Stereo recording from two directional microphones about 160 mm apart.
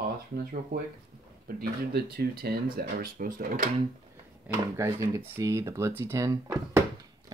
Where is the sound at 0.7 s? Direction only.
60° right (ahead or behind).